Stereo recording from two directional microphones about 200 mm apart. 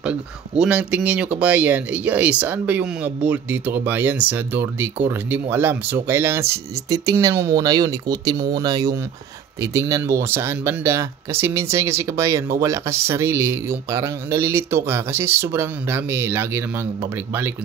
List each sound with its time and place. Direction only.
0.0 s speech: 5° right (ahead or behind)